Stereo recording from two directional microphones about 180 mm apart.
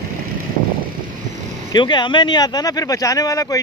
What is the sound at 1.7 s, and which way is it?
Speech, 25° left (ahead or behind).